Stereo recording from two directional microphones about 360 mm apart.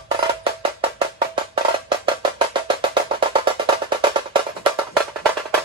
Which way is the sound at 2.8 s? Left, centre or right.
Centre.